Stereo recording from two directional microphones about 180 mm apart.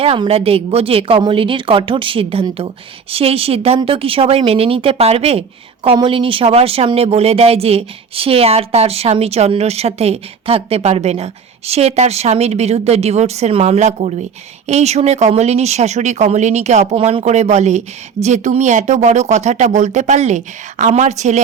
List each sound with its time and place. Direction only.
0.0 s speech: 30° right (ahead or behind)